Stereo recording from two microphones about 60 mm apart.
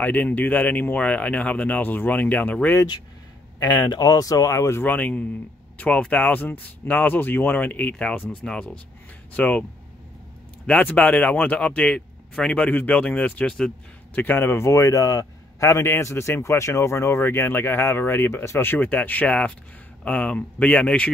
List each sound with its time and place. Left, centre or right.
0.0 s speech: left
3.5 s speech: left
4.7 s speech: left
10.8 s speech: left
14.1 s speech: left
15.9 s speech: left
18.4 s speech: left
18.7 s speech: left